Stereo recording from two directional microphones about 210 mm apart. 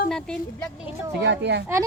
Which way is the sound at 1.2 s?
55° right (ahead or behind).